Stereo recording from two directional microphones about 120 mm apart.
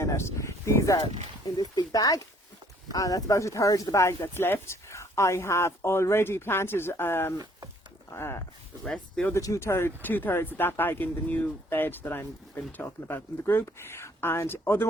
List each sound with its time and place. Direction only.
0.0 s speech: 25° left (ahead or behind)
8.8 s speech: 5° left (ahead or behind)
9.3 s speech: 25° left (ahead or behind)